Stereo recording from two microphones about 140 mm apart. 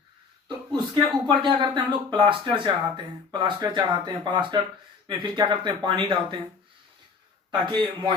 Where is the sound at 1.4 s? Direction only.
35° right (ahead or behind).